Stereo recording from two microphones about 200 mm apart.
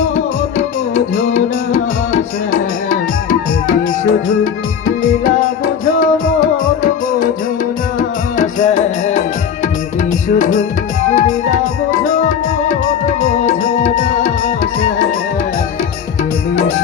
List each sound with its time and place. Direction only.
0.9 s music: 40° left (ahead or behind)
5.2 s music: 45° left (ahead or behind)